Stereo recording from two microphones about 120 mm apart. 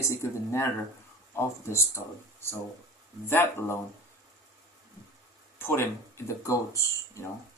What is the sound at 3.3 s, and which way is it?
Speech, 20° left (ahead or behind).